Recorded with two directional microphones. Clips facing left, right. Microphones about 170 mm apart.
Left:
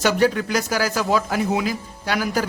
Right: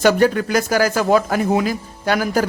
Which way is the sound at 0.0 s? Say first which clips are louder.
Right 4 dB; 50° right (ahead or behind).